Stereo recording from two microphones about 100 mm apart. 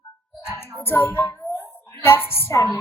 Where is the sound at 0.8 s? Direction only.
20° left (ahead or behind).